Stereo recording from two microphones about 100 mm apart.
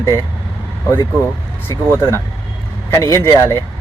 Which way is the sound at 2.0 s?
25° left (ahead or behind).